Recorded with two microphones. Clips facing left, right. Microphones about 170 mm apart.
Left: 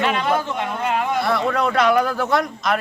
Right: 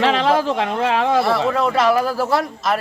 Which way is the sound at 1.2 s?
Centre (ahead or behind).